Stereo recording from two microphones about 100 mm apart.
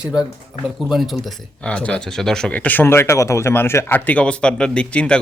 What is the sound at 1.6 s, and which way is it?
Speech, 10° left (ahead or behind).